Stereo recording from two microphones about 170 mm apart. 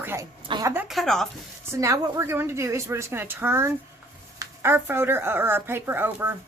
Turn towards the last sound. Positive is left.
turn(degrees=-10)  # may be behind; listen again after turning